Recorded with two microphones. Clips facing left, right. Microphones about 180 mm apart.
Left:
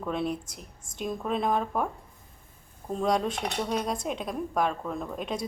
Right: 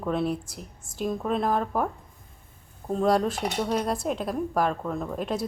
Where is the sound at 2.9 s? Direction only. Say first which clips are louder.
Right 4 dB; centre (ahead or behind).